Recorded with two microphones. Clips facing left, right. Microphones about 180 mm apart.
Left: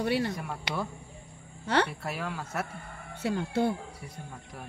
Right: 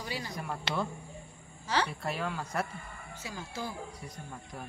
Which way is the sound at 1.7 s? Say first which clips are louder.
Left 4 dB; 60° left (ahead or behind).